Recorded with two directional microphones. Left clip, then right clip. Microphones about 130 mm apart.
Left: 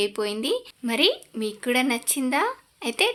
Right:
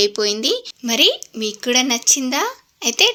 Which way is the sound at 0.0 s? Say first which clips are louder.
Right 8 dB; 20° right (ahead or behind).